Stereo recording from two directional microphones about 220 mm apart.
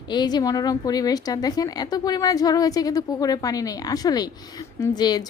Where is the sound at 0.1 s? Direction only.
20° left (ahead or behind).